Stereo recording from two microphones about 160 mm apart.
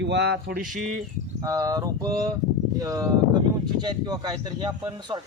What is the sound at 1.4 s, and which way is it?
Speech, 25° right (ahead or behind).